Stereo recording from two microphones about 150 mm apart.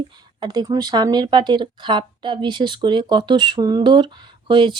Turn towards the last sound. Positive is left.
turn(degrees=-30)  # may be behind; listen again after turning